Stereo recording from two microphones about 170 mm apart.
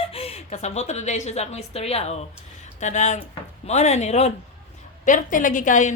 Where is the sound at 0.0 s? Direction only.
35° left (ahead or behind).